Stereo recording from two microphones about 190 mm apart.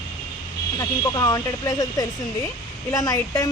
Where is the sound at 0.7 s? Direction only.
20° left (ahead or behind).